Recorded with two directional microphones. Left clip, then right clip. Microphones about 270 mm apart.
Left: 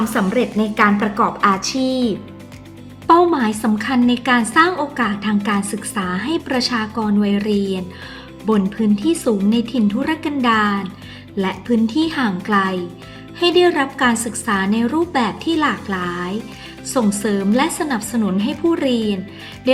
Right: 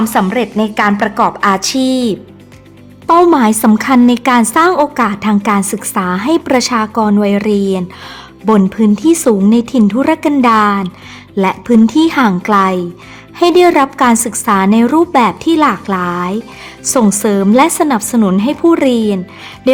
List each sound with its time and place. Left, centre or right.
0.1 s a woman's voice: right